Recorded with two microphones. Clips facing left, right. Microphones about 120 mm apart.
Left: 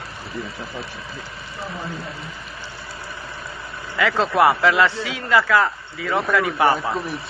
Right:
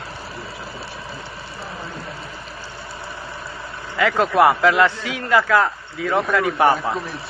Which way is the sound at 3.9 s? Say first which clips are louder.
Right 2 dB; 15° right (ahead or behind).